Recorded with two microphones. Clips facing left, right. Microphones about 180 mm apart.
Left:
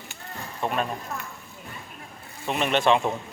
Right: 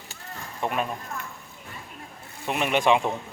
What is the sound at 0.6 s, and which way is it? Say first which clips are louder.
Speech: even; 15° right (ahead or behind).